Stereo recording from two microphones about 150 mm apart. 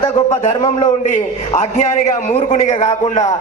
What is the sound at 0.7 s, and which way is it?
A man's voice, 55° left (ahead or behind).